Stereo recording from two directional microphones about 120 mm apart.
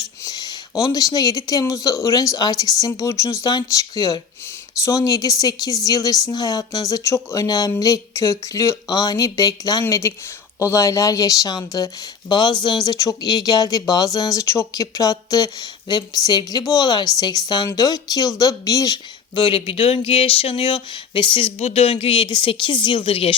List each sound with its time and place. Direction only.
0.3 s speech: 30° left (ahead or behind)
19.4 s speech: 45° left (ahead or behind)
21.6 s speech: 55° left (ahead or behind)